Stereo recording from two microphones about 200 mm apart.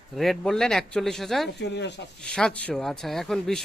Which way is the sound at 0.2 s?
Centre (ahead or behind).